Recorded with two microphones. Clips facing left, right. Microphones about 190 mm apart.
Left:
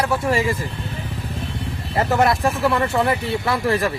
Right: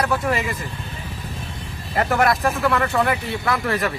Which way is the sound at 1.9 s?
25° left (ahead or behind).